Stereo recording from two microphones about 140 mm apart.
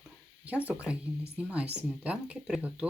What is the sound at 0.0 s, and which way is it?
Speech, 10° right (ahead or behind).